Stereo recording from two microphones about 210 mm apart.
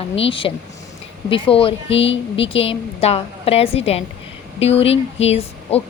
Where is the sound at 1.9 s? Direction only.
60° left (ahead or behind).